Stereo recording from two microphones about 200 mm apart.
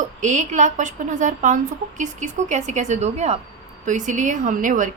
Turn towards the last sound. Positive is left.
turn(degrees=-40)  # may be behind; listen again after turning